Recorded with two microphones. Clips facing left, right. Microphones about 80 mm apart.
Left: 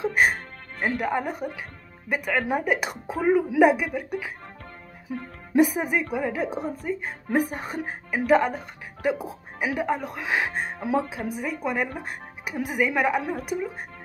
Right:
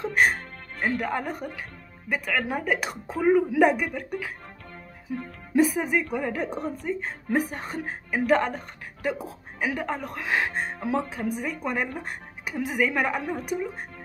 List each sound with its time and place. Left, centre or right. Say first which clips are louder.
0.0 s music: left 1 dB; centre
2.0 s speech: left 2 dB; centre
5.6 s speech: left 1 dB; centre
6.1 s a woman's voice: left 2 dB; centre